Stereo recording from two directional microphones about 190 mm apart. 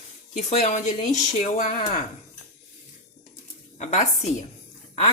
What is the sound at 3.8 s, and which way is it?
Speech, 40° left (ahead or behind).